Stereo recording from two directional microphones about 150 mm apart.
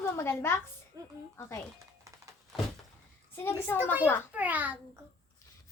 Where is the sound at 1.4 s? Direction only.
20° left (ahead or behind).